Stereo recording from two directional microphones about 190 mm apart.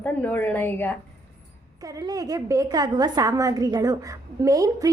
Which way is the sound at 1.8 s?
20° right (ahead or behind).